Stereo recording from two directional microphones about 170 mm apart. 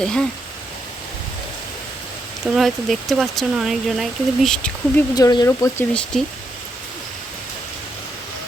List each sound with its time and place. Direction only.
0.0 s speech: 5° left (ahead or behind)
2.4 s speech: centre (ahead or behind)
5.1 s speech: 25° left (ahead or behind); by 6.2 s 5° left (ahead or behind)